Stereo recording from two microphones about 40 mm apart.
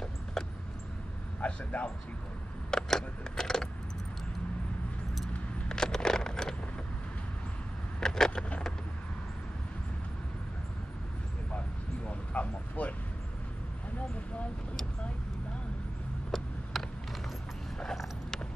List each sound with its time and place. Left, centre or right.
0.0 s vehicle: centre
1.4 s speech: left
2.7 s keys jangling: centre
5.7 s a sound: centre
8.0 s vehicle: centre
12.1 s a sound: left
16.7 s mechanisms: centre